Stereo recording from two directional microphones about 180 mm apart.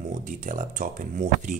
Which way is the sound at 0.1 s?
45° right (ahead or behind).